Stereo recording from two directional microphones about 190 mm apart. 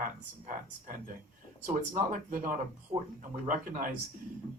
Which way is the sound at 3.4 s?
45° right (ahead or behind).